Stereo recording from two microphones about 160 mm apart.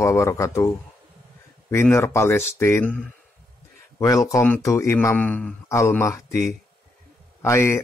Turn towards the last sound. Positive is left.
turn(degrees=15)  # may be behind; listen again after turning